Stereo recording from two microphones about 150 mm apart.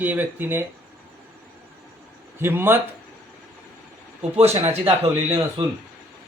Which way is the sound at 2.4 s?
15° right (ahead or behind).